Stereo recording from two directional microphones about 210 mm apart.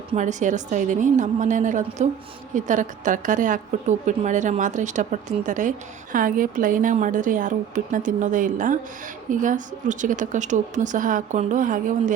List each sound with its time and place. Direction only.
0.1 s a woman's voice: 35° right (ahead or behind)